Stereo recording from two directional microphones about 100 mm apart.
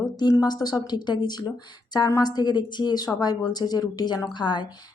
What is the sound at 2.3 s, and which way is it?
Speech, 45° left (ahead or behind).